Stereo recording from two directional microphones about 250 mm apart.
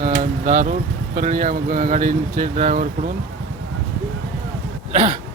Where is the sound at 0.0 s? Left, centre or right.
Right.